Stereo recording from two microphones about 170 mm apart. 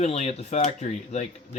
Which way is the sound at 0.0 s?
40° left (ahead or behind).